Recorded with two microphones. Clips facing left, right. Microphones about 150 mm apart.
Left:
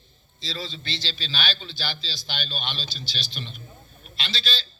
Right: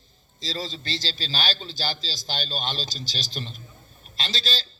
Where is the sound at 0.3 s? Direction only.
40° right (ahead or behind).